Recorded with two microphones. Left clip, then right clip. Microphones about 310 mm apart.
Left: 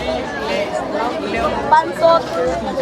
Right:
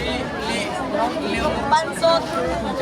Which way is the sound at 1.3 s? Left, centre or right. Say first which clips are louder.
Left 7 dB; left.